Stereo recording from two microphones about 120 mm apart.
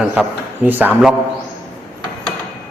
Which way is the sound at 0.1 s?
10° right (ahead or behind).